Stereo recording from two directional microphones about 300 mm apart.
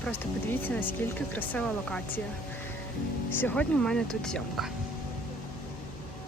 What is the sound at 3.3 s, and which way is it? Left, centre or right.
Speech, centre.